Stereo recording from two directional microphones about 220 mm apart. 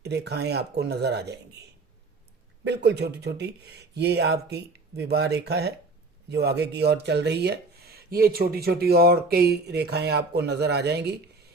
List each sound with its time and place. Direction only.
0.0 s speech: 50° right (ahead or behind)
2.6 s speech: 50° right (ahead or behind)